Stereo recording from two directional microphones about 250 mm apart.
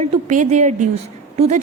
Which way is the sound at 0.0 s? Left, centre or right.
Right.